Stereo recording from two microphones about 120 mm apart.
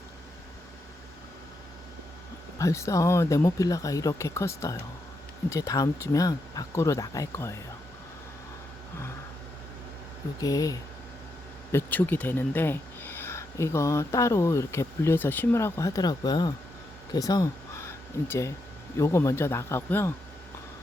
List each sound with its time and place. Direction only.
2.6 s speech: 25° left (ahead or behind)
10.4 s speech: 30° left (ahead or behind)
11.7 s speech: 15° left (ahead or behind)